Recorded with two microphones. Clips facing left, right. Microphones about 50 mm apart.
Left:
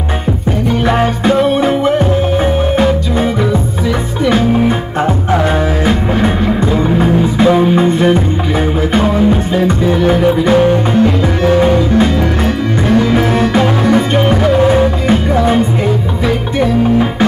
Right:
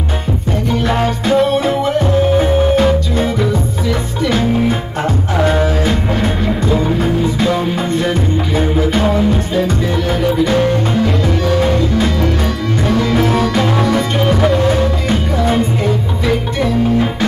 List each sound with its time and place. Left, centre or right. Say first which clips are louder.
0.8 s music: left 4 dB; centre